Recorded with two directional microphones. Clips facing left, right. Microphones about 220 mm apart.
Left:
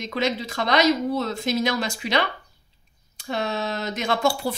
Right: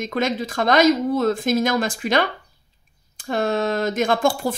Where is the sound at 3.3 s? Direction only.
50° right (ahead or behind).